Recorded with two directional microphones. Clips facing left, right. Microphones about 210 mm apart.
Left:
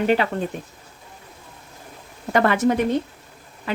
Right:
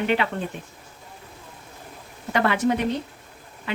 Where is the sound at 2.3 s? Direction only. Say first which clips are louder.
Left 3 dB; 45° left (ahead or behind).